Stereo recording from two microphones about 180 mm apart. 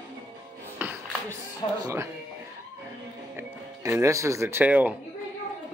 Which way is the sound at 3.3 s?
15° right (ahead or behind).